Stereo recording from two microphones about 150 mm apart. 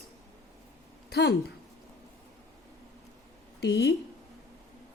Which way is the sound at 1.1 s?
90° left.